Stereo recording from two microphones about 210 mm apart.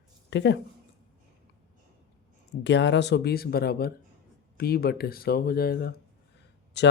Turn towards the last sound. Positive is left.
turn(degrees=55)  # may be behind; listen again after turning